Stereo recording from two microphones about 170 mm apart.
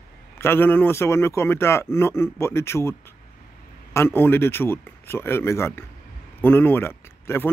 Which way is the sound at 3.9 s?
15° left (ahead or behind).